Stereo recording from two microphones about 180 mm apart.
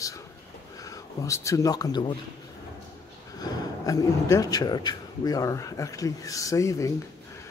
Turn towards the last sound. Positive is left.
turn(degrees=15)  # may be behind; listen again after turning